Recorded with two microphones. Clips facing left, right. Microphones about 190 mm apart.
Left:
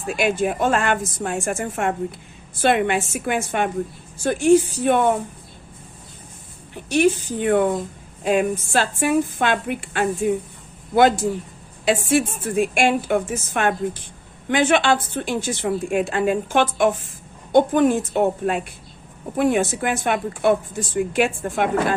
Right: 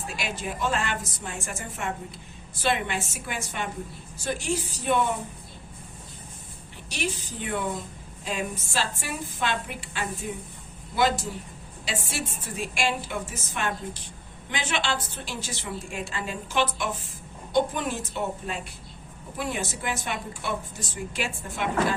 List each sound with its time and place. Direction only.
0.2 s speech: 55° left (ahead or behind)
6.9 s a woman's voice: 55° left (ahead or behind)